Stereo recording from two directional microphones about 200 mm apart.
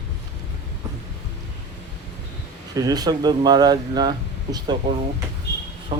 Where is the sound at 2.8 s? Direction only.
20° right (ahead or behind).